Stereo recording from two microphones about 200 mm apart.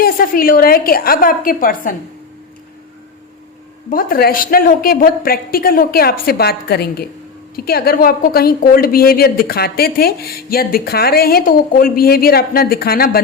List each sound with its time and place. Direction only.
0.0 s a woman's voice: 45° left (ahead or behind)
3.8 s a woman's voice: 45° left (ahead or behind)